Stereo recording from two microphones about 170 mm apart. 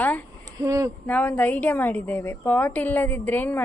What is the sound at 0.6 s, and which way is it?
Speech, 20° right (ahead or behind).